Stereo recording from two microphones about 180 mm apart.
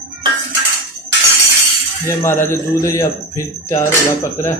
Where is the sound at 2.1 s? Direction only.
15° left (ahead or behind).